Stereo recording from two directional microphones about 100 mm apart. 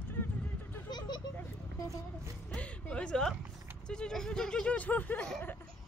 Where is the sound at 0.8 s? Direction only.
45° left (ahead or behind).